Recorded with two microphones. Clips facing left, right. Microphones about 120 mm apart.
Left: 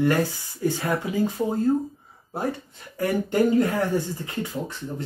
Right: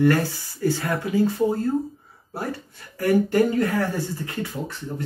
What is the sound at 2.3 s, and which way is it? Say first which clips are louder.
Speech: left 2 dB; 20° left (ahead or behind).